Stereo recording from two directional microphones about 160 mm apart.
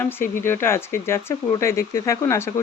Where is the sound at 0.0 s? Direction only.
15° left (ahead or behind).